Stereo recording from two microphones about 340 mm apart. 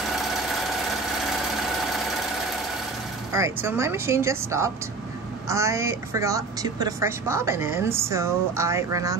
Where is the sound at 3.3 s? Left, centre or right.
Centre.